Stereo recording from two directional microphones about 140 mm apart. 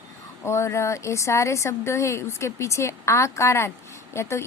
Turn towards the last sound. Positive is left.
turn(degrees=20)  # may be behind; listen again after turning